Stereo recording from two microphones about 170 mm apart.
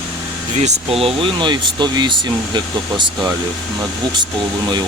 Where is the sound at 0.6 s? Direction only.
40° right (ahead or behind).